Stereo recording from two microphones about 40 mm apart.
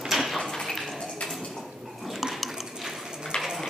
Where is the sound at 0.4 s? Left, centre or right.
Centre.